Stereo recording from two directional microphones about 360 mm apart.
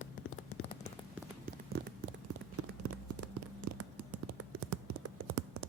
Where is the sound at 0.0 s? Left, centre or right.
Left.